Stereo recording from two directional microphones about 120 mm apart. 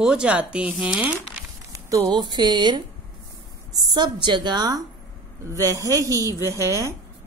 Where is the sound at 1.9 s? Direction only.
30° right (ahead or behind).